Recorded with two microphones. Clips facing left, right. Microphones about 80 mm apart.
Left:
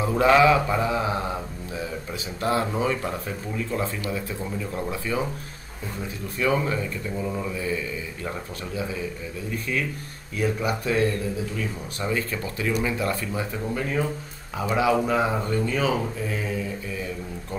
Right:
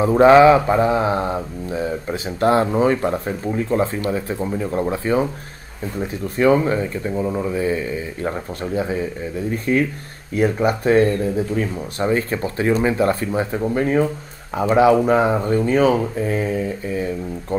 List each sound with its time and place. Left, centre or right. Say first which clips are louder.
0.0 s speech: right 8 dB; right
15.3 s speech: right 7 dB; right
15.6 s speech: right 10 dB; right